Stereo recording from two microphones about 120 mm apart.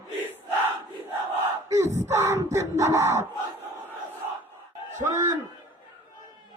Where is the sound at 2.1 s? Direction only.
25° right (ahead or behind).